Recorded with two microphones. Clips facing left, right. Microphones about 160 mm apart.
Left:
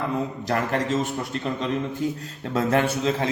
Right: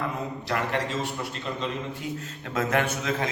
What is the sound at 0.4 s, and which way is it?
Speech, 40° left (ahead or behind).